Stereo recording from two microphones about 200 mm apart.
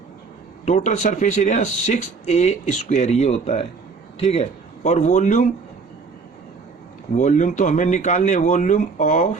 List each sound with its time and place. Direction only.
0.6 s speech: 35° left (ahead or behind)
7.2 s speech: 40° left (ahead or behind)